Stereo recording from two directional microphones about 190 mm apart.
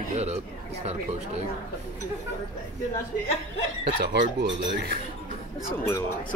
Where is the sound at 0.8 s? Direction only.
35° right (ahead or behind).